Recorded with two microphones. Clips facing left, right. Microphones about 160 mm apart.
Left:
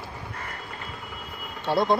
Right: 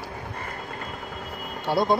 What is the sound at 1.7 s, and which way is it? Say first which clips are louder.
Speech: even; 5° right (ahead or behind).